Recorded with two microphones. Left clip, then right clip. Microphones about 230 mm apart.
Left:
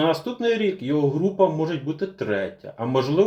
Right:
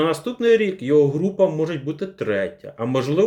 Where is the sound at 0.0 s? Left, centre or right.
Right.